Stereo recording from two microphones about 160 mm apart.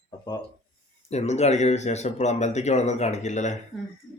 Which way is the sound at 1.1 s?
45° left (ahead or behind).